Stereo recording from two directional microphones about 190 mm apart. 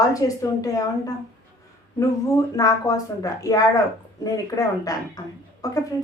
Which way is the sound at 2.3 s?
15° left (ahead or behind).